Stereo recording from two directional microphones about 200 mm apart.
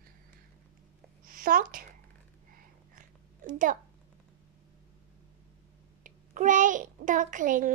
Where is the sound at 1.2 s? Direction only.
45° right (ahead or behind).